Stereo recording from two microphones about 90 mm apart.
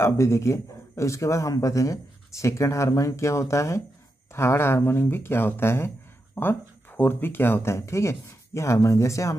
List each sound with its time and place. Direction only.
0.0 s speech: 35° left (ahead or behind)